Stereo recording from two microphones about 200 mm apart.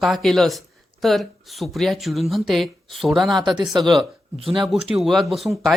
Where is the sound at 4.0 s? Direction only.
25° right (ahead or behind).